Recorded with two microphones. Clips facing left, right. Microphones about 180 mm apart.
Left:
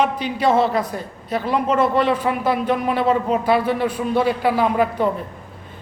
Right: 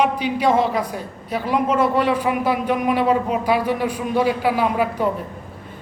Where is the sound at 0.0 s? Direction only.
10° right (ahead or behind).